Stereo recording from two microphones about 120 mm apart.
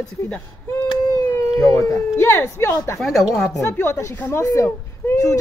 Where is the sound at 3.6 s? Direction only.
20° left (ahead or behind).